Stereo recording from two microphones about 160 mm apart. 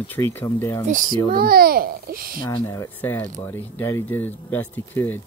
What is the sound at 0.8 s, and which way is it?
Speech, 55° right (ahead or behind).